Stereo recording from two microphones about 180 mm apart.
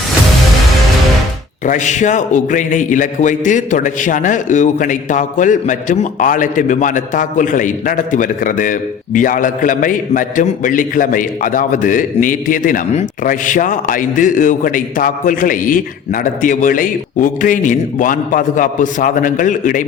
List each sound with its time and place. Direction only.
1.6 s a man's voice: 45° left (ahead or behind)